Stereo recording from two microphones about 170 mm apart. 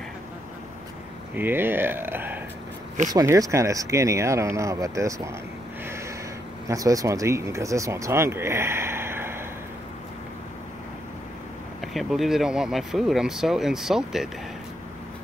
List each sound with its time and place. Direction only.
1.3 s speech: 10° right (ahead or behind)
6.7 s speech: 20° right (ahead or behind)
11.9 s speech: centre (ahead or behind)